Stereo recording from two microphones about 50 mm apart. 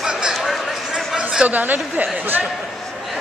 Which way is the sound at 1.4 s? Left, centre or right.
Right.